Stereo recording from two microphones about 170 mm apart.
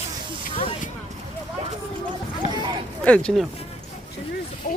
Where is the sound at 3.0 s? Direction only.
5° left (ahead or behind).